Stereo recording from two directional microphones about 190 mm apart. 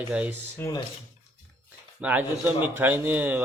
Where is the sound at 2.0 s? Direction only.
10° right (ahead or behind).